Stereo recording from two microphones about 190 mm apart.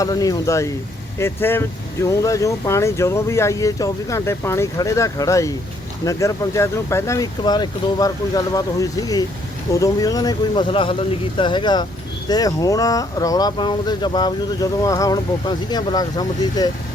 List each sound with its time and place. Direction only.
0.0 s speech: 20° left (ahead or behind)